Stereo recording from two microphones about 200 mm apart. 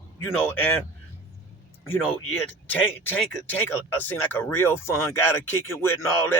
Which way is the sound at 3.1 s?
10° left (ahead or behind).